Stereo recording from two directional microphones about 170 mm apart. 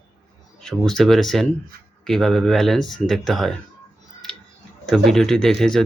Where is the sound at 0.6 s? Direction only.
Centre (ahead or behind).